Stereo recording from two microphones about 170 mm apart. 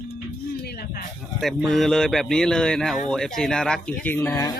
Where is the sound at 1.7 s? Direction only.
Centre (ahead or behind).